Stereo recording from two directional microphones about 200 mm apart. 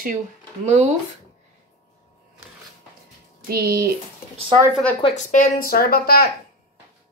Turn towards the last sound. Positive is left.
turn(degrees=50)  # may be behind; listen again after turning